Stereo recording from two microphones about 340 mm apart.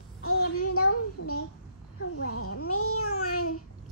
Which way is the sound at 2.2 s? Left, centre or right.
Left.